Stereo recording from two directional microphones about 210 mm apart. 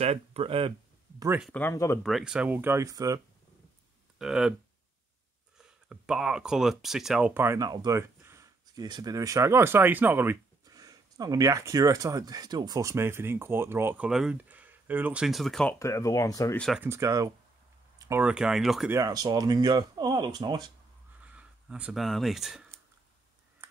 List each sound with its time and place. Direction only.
0.0 s speech: 30° right (ahead or behind)
1.4 s speech: 10° left (ahead or behind)
2.0 s speech: centre (ahead or behind)
4.2 s speech: 5° right (ahead or behind)
5.6 s speech: 5° right (ahead or behind)
15.8 s speech: 15° left (ahead or behind)
16.5 s speech: centre (ahead or behind)
16.8 s speech: 15° right (ahead or behind)
18.9 s speech: 15° right (ahead or behind)
21.2 s a sound: 5° right (ahead or behind)